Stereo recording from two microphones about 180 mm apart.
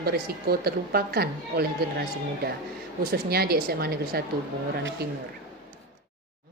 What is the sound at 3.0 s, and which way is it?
A woman's voice, 60° right (ahead or behind).